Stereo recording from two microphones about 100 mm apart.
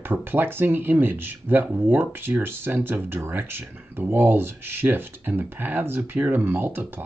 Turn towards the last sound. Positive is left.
turn(degrees=-20)  # may be behind; listen again after turning